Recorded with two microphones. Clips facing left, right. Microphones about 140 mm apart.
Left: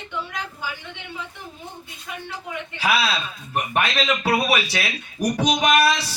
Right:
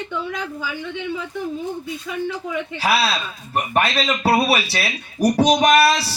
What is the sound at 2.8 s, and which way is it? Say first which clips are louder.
Music: right 1 dB; 35° right (ahead or behind).